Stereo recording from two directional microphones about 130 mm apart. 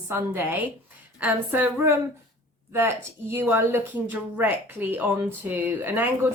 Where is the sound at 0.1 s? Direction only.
15° right (ahead or behind).